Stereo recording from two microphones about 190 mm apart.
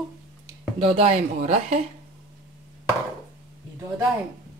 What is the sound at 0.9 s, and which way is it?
Cutlery, 35° right (ahead or behind).